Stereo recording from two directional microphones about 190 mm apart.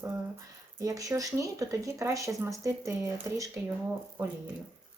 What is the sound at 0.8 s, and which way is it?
A woman's voice, 15° right (ahead or behind).